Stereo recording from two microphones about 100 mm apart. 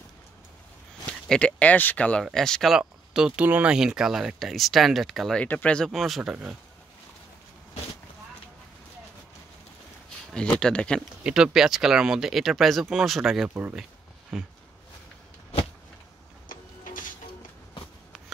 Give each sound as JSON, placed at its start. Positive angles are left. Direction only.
{"t": 1.3, "sound": "speech", "side_deg": 10}
{"t": 2.8, "sound": "speech", "side_deg": -5}
{"t": 3.4, "sound": "speech", "side_deg": -15}
{"t": 3.7, "sound": "speech", "side_deg": -5}
{"t": 5.4, "sound": "speech", "side_deg": 15}
{"t": 10.6, "sound": "speech", "side_deg": 10}
{"t": 11.2, "sound": "speech", "side_deg": -5}
{"t": 13.5, "sound": "speech", "side_deg": -15}